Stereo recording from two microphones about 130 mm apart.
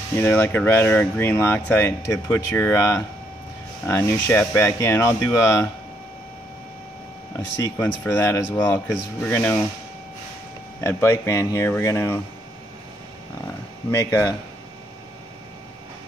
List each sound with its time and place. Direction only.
0.2 s speech: 15° left (ahead or behind)
7.3 s speech: 20° left (ahead or behind)
10.8 s speech: 20° left (ahead or behind)